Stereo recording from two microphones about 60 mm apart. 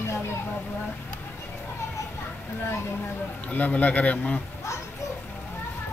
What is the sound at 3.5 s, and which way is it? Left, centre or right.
Speech, left.